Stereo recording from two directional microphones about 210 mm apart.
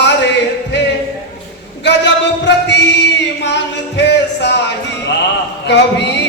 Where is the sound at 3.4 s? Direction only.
55° left (ahead or behind).